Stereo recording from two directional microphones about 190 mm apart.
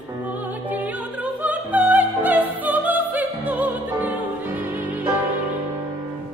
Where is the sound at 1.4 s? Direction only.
10° right (ahead or behind).